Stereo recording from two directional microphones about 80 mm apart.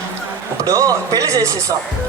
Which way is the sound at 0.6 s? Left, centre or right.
Right.